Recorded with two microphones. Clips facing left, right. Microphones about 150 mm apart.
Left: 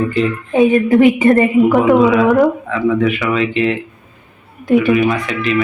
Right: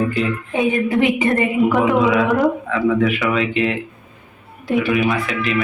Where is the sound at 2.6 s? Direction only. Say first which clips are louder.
Left 2 dB; centre (ahead or behind).